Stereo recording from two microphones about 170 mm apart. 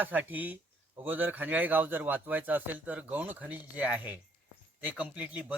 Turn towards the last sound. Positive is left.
turn(degrees=-10)  # may be behind; listen again after turning